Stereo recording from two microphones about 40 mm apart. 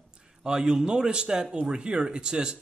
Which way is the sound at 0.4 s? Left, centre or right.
Centre.